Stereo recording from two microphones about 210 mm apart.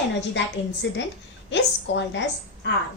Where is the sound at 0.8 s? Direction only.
60° left (ahead or behind).